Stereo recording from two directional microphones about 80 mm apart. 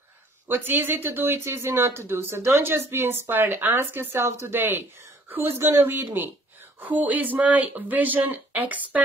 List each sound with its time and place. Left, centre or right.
0.5 s speech: right